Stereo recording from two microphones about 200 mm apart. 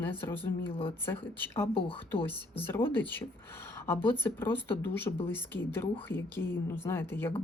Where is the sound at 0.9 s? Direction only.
10° left (ahead or behind).